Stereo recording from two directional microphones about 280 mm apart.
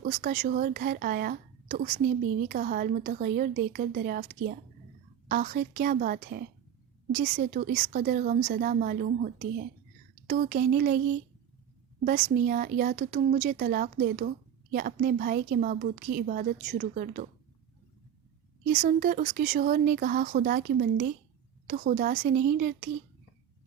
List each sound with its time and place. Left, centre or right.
0.0 s a woman's voice: right
12.0 s speech: right
18.7 s speech: right